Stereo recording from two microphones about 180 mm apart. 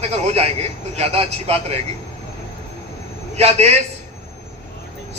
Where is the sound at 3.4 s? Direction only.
35° right (ahead or behind).